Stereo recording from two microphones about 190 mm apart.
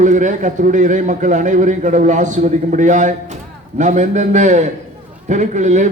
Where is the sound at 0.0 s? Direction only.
40° right (ahead or behind).